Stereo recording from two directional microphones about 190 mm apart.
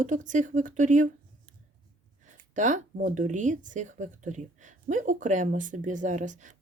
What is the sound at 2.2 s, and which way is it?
Speech, 40° right (ahead or behind).